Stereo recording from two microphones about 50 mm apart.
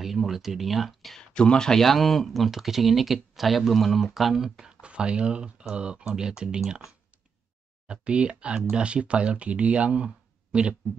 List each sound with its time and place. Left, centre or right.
0.0 s speech: centre
1.3 s speech: centre
4.8 s speech: centre
7.9 s speech: right